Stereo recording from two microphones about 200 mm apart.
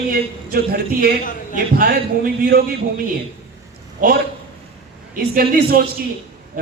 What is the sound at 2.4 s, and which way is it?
Speech, 50° right (ahead or behind).